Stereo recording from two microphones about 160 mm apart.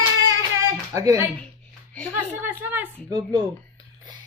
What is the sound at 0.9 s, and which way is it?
Speech, 20° right (ahead or behind).